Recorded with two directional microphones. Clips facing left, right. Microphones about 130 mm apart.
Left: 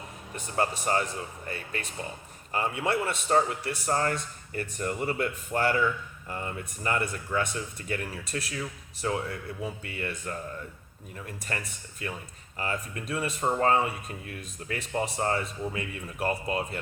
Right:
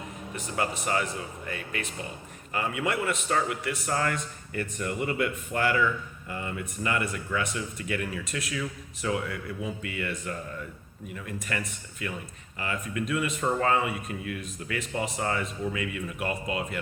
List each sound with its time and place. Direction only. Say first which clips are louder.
0.3 s speech: left 2 dB; 35° left (ahead or behind)